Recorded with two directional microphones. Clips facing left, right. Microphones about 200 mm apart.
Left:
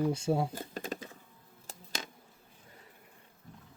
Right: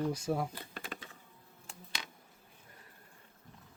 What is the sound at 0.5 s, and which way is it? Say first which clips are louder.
Typing: left 7 dB; 40° left (ahead or behind).